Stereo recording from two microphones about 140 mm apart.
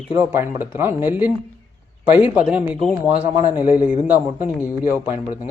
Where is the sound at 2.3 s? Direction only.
10° right (ahead or behind).